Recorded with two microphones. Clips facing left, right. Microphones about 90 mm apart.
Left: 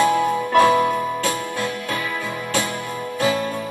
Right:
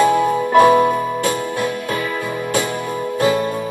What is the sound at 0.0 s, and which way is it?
Music, 15° right (ahead or behind).